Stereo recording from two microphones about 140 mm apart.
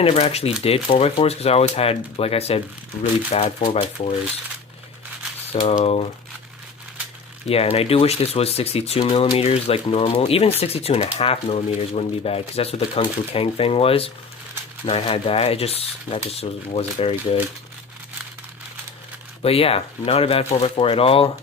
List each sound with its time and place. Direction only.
0.0 s speech: 45° left (ahead or behind)
5.5 s speech: 50° left (ahead or behind)
7.4 s speech: 45° left (ahead or behind)
19.4 s speech: 45° left (ahead or behind)